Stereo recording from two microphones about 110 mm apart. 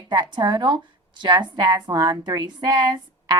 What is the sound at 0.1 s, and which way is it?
A woman's voice, 45° right (ahead or behind).